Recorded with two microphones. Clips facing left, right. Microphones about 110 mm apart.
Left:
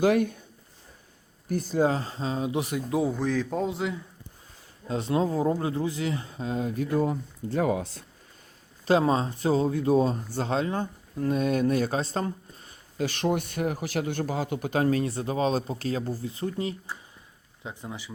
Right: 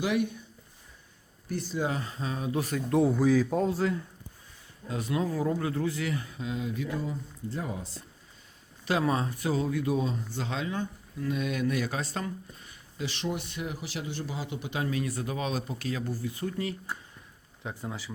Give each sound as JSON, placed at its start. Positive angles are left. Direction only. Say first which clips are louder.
{"t": 0.0, "sound": "speech", "louder": "left 6 dB", "side_deg": 45}
{"t": 1.5, "sound": "speech", "louder": "left 7 dB", "side_deg": 45}
{"t": 2.9, "sound": "a man's voice", "louder": "right 3 dB", "side_deg": 5}
{"t": 4.9, "sound": "speech", "louder": "left 4 dB", "side_deg": 30}
{"t": 8.8, "sound": "speech", "louder": "left 5 dB", "side_deg": 30}
{"t": 15.0, "sound": "speech", "louder": "left 6 dB", "side_deg": 30}